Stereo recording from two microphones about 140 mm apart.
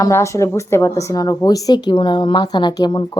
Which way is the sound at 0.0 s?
20° left (ahead or behind).